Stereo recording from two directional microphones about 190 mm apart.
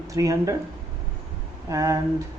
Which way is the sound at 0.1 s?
15° right (ahead or behind).